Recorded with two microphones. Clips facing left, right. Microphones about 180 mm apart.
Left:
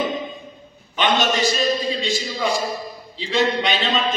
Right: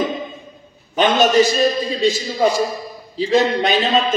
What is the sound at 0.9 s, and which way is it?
A man's voice, 45° right (ahead or behind).